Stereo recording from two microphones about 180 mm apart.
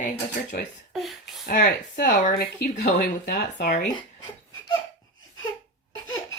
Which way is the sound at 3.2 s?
65° left (ahead or behind).